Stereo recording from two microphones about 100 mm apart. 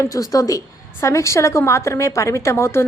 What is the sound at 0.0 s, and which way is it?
A woman's voice, 35° left (ahead or behind).